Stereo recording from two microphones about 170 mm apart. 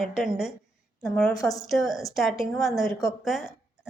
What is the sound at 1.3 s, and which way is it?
Speech, 20° left (ahead or behind).